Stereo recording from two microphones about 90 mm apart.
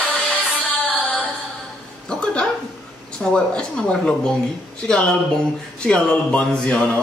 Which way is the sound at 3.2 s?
10° left (ahead or behind).